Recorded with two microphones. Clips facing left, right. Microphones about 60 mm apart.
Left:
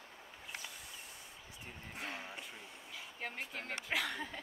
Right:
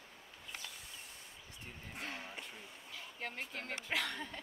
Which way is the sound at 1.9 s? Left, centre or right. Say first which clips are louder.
Left 1 dB; centre.